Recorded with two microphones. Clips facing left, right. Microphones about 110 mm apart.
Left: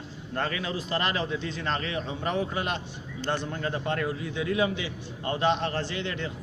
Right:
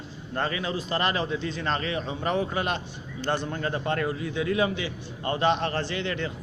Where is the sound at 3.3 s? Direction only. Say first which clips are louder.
Right 2 dB; 50° right (ahead or behind); by 6.3 s 75° right (ahead or behind).